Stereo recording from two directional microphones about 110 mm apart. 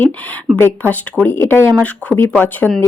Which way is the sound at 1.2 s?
20° left (ahead or behind).